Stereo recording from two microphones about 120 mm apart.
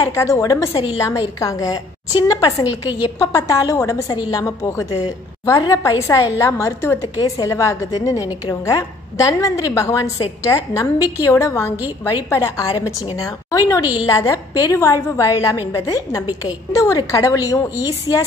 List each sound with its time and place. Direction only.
0.0 s a woman's voice: 25° left (ahead or behind)
2.6 s a woman's voice: 10° right (ahead or behind)
3.2 s a woman's voice: 30° left (ahead or behind)
6.0 s a woman's voice: 25° left (ahead or behind)